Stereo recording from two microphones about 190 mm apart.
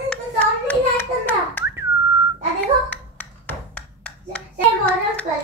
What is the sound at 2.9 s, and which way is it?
Wood block, 10° left (ahead or behind).